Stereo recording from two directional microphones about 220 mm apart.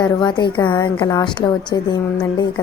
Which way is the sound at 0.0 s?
20° left (ahead or behind).